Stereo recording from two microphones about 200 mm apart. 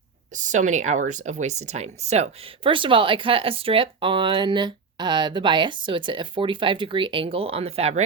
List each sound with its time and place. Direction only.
0.3 s speech: 40° right (ahead or behind)